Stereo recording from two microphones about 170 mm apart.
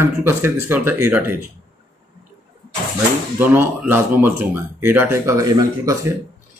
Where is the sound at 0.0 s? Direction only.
15° right (ahead or behind).